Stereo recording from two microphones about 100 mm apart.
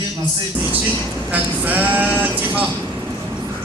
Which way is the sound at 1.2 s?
15° right (ahead or behind).